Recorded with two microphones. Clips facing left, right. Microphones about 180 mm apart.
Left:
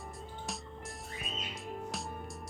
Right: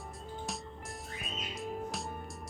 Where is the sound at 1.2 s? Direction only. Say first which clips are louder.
Right 3 dB; centre (ahead or behind).